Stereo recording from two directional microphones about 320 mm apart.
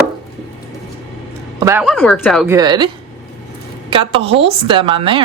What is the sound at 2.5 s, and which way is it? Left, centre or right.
Speech, centre.